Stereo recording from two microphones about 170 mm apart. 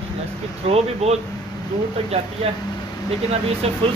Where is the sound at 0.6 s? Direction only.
40° right (ahead or behind).